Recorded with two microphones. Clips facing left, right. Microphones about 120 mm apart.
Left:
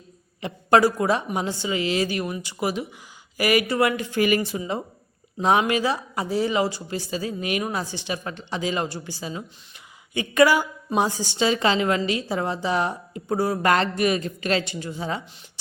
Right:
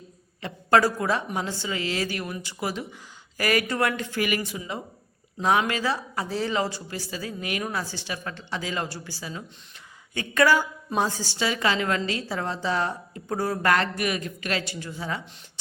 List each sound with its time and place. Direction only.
0.4 s a woman's voice: 15° left (ahead or behind)
4.2 s a woman's voice: 30° left (ahead or behind)